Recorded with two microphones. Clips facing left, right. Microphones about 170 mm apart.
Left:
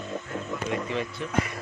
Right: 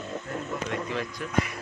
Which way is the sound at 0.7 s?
Centre (ahead or behind).